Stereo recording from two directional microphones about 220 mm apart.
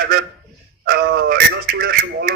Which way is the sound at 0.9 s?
45° right (ahead or behind).